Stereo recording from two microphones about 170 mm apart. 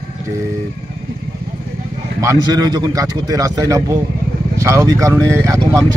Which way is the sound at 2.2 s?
20° right (ahead or behind).